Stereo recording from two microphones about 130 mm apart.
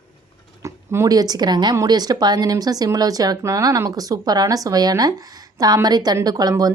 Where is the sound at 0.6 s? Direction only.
20° right (ahead or behind).